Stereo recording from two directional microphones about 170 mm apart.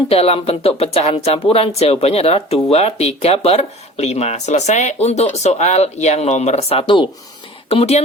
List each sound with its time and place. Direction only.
0.1 s speech: 35° left (ahead or behind)